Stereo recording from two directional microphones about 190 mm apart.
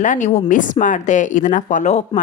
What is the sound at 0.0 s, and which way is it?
A woman's voice, 40° left (ahead or behind).